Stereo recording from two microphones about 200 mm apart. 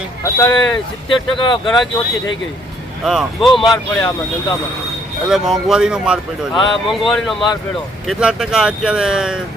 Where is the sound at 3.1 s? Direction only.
Centre (ahead or behind).